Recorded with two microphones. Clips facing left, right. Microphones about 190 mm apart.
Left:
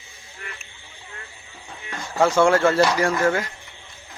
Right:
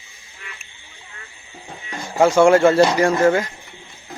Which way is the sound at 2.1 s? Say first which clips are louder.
Right 4 dB; 15° right (ahead or behind).